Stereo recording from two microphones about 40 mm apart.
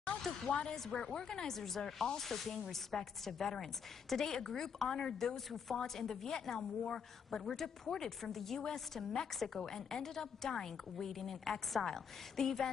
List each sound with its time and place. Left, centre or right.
0.5 s a woman's voice: left